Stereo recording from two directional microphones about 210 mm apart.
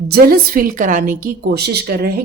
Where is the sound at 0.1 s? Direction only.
45° right (ahead or behind).